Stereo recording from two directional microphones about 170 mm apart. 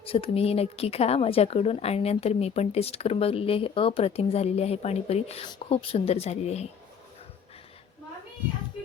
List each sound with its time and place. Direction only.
0.0 s speech: 35° left (ahead or behind)